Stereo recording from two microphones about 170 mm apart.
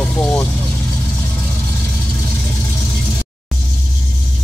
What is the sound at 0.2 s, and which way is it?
Vehicle, 10° left (ahead or behind).